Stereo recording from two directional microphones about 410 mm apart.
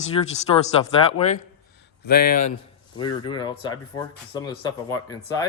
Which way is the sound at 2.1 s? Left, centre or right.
Left.